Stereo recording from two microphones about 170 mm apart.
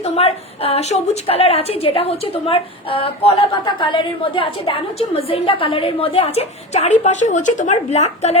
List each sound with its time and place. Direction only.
0.0 s a woman's voice: 35° left (ahead or behind)